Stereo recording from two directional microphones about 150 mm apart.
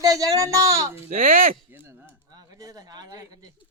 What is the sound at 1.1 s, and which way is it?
Speech, 70° right (ahead or behind).